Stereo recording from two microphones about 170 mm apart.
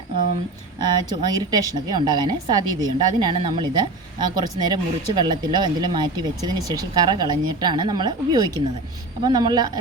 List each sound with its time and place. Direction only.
0.8 s a woman's voice: 25° right (ahead or behind)